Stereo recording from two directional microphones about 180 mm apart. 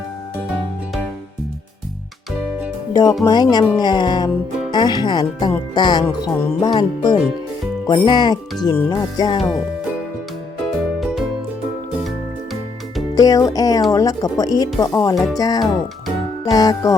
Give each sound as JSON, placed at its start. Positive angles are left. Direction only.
{"t": 2.9, "sound": "speech", "side_deg": 20}
{"t": 6.1, "sound": "music", "side_deg": 15}
{"t": 6.6, "sound": "speech", "side_deg": 25}
{"t": 11.0, "sound": "music", "side_deg": 0}
{"t": 13.1, "sound": "speech", "side_deg": 20}
{"t": 15.1, "sound": "speech", "side_deg": 0}
{"t": 15.4, "sound": "speech", "side_deg": 20}